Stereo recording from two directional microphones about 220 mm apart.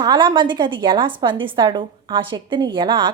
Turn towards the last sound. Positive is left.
turn(degrees=-20)  # may be behind; listen again after turning